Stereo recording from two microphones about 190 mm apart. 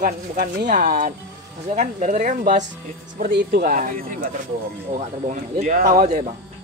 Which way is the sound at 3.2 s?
60° right (ahead or behind).